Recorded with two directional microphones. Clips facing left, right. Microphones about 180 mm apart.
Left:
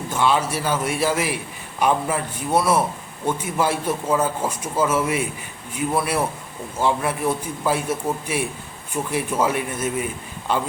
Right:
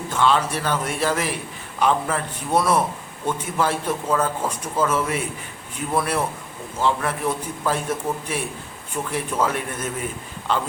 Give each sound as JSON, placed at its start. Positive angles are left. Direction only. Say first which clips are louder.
{"t": 0.1, "sound": "a man's voice", "louder": "even", "side_deg": 10}